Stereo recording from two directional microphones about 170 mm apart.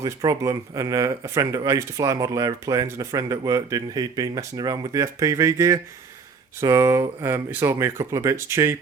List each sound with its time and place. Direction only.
0.0 s speech: 20° right (ahead or behind)